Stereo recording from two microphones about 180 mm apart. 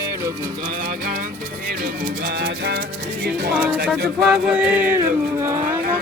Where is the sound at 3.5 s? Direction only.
10° right (ahead or behind).